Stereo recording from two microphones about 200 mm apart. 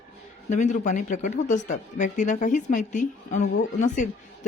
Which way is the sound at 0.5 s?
35° left (ahead or behind).